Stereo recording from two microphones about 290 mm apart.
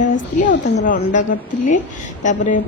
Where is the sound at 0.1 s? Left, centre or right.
Left.